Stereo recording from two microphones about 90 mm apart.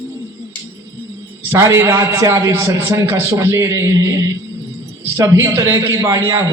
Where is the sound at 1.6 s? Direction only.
35° right (ahead or behind).